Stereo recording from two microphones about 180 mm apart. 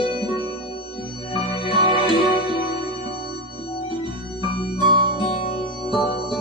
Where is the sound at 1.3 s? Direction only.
25° left (ahead or behind).